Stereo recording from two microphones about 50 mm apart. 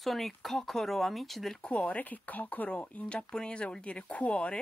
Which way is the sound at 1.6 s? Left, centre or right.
Left.